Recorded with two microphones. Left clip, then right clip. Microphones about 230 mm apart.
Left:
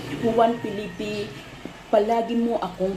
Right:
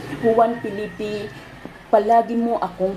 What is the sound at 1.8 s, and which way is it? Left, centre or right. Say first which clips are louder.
Speech: right 5 dB; centre.